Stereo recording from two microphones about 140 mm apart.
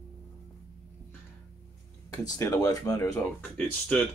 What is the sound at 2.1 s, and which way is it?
Speech, 25° left (ahead or behind).